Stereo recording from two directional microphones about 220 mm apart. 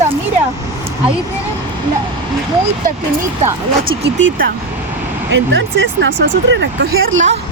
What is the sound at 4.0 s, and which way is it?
Speech, 55° right (ahead or behind).